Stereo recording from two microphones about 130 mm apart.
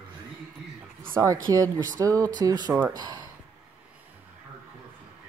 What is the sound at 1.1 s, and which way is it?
Speech, 25° right (ahead or behind).